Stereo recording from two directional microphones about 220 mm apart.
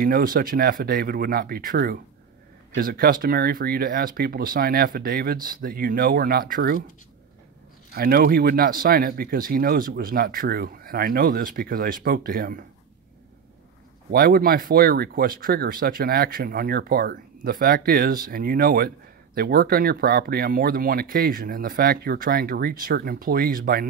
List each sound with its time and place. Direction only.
0.0 s speech: 40° right (ahead or behind)
7.9 s speech: 45° right (ahead or behind)
14.1 s speech: 45° right (ahead or behind)